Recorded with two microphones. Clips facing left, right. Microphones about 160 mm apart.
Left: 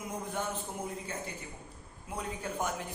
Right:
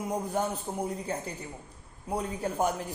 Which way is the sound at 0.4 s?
40° right (ahead or behind).